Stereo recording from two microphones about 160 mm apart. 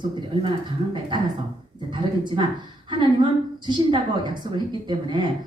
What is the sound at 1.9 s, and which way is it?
Speech, 30° right (ahead or behind).